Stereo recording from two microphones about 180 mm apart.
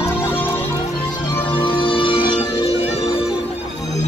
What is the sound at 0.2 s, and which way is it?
Music, 10° left (ahead or behind).